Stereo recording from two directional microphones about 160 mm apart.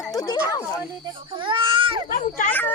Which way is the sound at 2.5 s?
10° left (ahead or behind).